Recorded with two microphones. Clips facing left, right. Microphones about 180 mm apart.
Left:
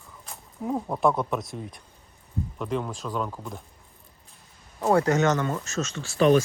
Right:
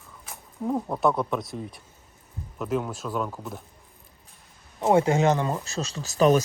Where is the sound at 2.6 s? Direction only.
5° right (ahead or behind).